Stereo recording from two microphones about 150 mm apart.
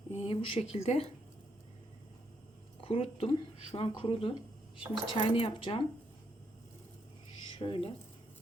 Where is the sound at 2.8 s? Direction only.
40° left (ahead or behind).